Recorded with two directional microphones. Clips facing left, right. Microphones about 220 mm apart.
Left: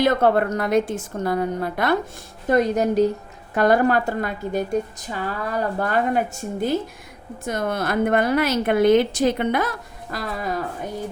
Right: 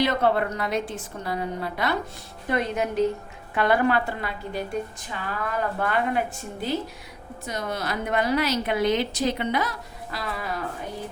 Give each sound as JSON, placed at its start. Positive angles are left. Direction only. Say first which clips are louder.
{"t": 0.0, "sound": "a woman's voice", "louder": "left 4 dB", "side_deg": 50}
{"t": 2.5, "sound": "a woman's voice", "louder": "left 7 dB", "side_deg": 40}